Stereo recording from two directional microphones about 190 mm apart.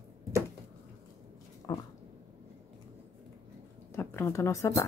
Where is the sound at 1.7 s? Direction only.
20° left (ahead or behind).